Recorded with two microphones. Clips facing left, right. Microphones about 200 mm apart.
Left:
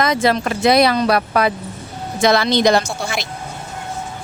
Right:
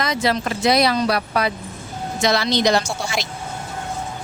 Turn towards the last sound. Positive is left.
turn(degrees=55)  # may be behind; listen again after turning